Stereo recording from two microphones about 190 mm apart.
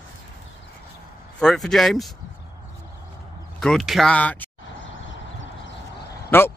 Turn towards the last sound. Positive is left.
turn(degrees=10)  # may be behind; listen again after turning